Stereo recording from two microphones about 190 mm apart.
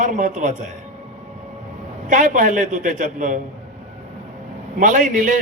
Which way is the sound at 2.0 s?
40° right (ahead or behind).